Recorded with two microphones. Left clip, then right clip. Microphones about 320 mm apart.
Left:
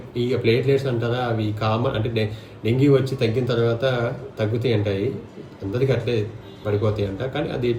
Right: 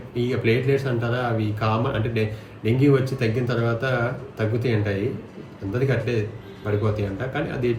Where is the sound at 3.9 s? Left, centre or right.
Centre.